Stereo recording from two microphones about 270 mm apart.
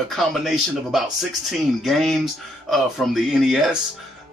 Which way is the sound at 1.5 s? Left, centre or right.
Centre.